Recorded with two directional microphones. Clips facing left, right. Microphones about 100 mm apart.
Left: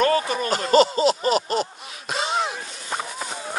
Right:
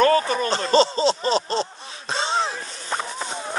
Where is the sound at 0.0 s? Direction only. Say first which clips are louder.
Right 3 dB; 35° right (ahead or behind).